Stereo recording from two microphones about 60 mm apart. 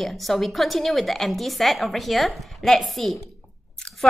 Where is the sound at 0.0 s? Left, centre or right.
Centre.